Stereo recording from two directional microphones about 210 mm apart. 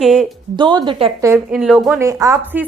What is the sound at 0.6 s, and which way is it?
A woman's voice, 20° right (ahead or behind).